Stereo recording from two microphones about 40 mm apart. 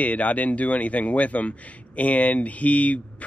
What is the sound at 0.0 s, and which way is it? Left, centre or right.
Speech, left.